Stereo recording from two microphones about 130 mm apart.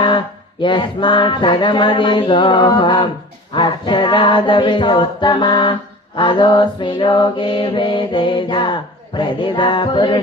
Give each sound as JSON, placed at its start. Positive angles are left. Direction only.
{"t": 0.6, "sound": "mantra", "side_deg": 40}